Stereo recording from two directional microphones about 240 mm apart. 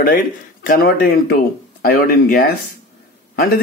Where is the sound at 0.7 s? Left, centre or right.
Left.